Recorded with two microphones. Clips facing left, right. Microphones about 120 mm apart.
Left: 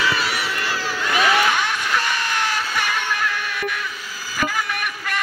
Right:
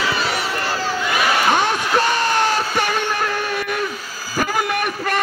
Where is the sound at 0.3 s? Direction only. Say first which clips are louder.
Right 3 dB; 30° right (ahead or behind).